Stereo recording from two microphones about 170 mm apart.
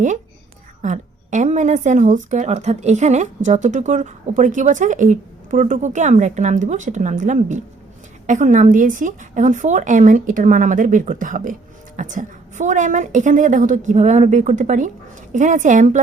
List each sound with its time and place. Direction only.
0.8 s a woman's voice: 45° right (ahead or behind)